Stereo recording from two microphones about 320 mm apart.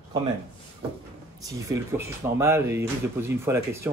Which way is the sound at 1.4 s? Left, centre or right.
Centre.